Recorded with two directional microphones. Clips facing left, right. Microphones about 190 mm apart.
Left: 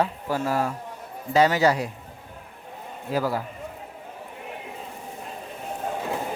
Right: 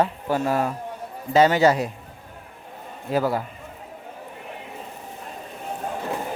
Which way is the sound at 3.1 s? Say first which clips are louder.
Right 3 dB; 25° right (ahead or behind).